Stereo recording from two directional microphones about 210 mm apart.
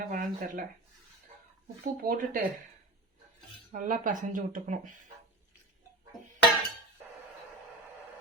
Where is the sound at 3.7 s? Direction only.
40° right (ahead or behind).